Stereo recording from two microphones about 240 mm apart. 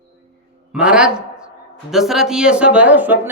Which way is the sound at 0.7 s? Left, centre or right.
Centre.